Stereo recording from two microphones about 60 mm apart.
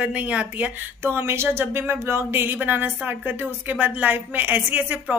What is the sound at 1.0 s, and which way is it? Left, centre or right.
A woman's voice, right.